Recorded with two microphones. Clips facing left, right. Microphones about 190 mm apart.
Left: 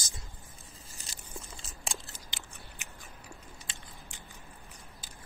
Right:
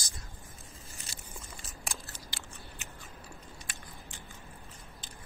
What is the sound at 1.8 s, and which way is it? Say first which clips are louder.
Biting: left 2 dB; 20° left (ahead or behind).